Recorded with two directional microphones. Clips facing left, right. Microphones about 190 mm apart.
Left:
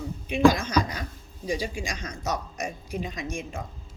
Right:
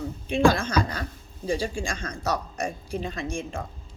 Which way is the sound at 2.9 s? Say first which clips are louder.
Right 2 dB; 15° left (ahead or behind).